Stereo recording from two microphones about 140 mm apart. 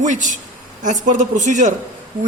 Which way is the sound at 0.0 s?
60° right (ahead or behind).